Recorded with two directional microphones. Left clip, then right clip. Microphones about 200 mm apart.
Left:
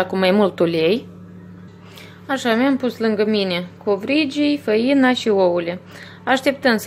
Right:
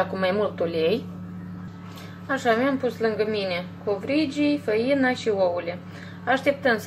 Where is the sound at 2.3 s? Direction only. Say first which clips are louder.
Left 4 dB; 50° left (ahead or behind).